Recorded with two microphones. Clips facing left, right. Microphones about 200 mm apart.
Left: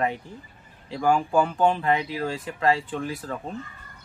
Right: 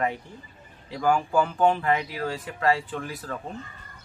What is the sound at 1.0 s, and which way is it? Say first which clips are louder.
Speech: left 1 dB; 25° left (ahead or behind).